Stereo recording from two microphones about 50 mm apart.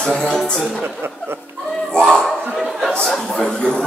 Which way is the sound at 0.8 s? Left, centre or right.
Right.